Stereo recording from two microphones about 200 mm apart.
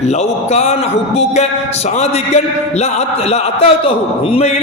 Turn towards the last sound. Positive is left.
turn(degrees=30)  # may be behind; listen again after turning